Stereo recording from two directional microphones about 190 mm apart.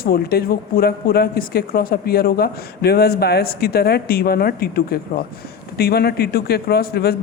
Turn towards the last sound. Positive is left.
turn(degrees=55)  # may be behind; listen again after turning